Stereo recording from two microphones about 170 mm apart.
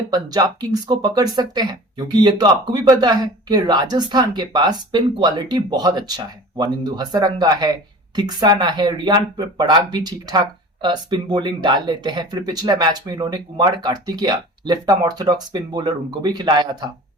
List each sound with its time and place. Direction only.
0.1 s speech: 25° right (ahead or behind)